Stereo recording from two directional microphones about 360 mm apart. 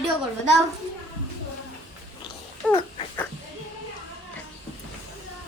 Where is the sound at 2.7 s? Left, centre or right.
Centre.